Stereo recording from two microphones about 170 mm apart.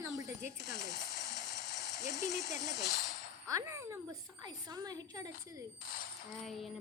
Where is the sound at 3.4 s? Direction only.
20° right (ahead or behind).